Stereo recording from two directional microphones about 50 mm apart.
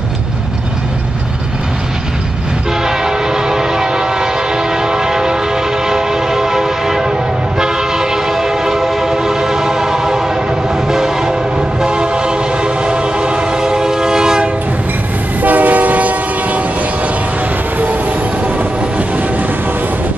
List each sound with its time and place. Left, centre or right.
2.8 s train: centre
15.4 s train: right